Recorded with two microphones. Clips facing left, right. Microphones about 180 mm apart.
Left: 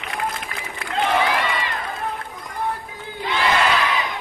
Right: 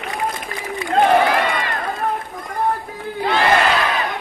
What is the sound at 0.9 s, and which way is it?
Crowd, 50° right (ahead or behind).